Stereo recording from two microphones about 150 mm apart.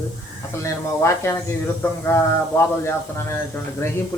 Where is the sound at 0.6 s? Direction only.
20° left (ahead or behind).